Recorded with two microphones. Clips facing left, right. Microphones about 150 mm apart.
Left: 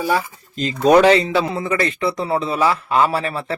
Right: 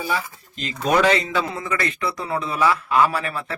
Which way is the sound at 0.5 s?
35° left (ahead or behind).